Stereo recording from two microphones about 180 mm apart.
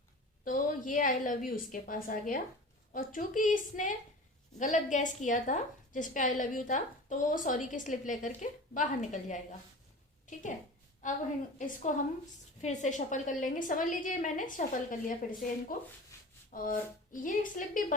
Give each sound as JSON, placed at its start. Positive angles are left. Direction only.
{"t": 0.4, "sound": "a woman's voice", "side_deg": 45}